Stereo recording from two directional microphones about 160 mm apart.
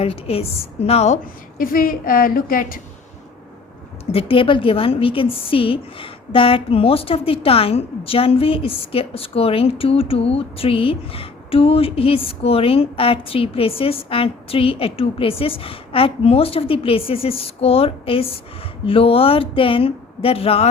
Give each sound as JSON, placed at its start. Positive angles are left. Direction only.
{"t": 0.0, "sound": "a woman's voice", "side_deg": 40}
{"t": 4.1, "sound": "a woman's voice", "side_deg": 35}